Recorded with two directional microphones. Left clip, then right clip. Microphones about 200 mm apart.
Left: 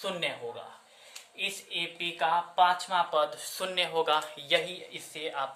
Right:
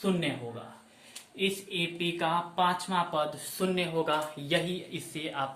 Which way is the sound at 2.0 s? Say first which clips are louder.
Left 3 dB; 25° left (ahead or behind).